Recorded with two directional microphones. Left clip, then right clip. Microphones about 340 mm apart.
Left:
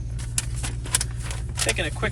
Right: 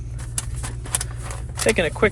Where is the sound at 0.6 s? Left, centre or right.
Centre.